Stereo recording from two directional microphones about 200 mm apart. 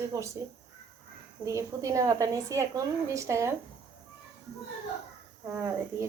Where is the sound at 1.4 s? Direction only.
15° right (ahead or behind).